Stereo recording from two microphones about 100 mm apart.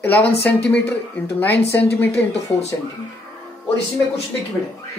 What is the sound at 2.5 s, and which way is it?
Speech, 70° left (ahead or behind).